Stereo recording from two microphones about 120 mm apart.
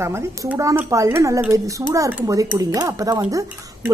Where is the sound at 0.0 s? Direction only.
20° right (ahead or behind).